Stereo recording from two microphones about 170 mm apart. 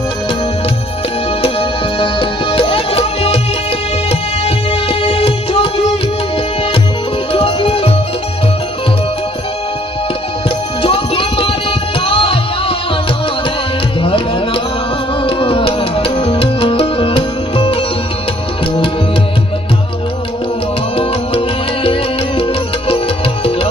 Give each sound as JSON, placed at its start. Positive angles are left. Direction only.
{"t": 1.4, "sound": "music", "side_deg": 30}
{"t": 7.3, "sound": "music", "side_deg": 35}
{"t": 10.8, "sound": "music", "side_deg": 30}
{"t": 14.0, "sound": "tabla", "side_deg": 30}
{"t": 15.2, "sound": "music", "side_deg": 30}
{"t": 20.9, "sound": "music", "side_deg": 35}